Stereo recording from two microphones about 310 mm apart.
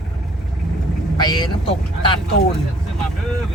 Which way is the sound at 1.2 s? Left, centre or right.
Centre.